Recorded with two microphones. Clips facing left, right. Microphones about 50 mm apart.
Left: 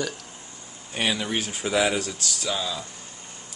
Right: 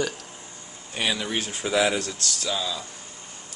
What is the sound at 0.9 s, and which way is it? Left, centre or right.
Speech, centre.